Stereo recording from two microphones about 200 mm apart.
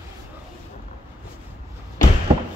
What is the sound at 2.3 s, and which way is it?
Thump, 30° right (ahead or behind).